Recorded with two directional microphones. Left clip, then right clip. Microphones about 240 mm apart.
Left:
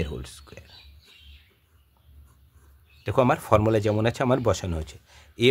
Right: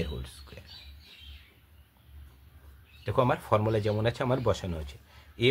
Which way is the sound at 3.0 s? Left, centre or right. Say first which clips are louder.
Left 5 dB; left.